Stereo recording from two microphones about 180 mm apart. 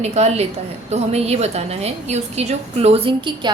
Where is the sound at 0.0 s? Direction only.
40° right (ahead or behind).